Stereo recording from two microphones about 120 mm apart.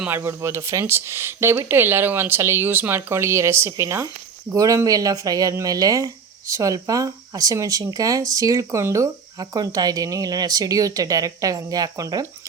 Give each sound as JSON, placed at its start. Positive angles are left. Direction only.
{"t": 0.0, "sound": "speech", "side_deg": -20}